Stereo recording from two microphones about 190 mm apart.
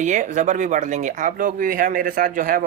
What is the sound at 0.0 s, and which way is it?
Speech, 40° right (ahead or behind).